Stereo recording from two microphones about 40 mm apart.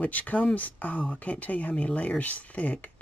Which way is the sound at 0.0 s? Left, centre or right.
Left.